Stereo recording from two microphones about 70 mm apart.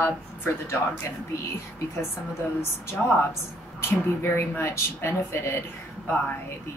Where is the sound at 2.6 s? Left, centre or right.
Left.